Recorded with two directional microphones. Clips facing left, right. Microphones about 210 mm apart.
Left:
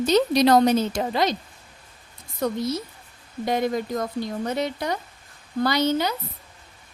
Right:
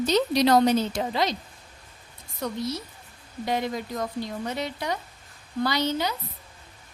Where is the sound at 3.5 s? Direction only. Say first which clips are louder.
Left 4 dB; 45° left (ahead or behind).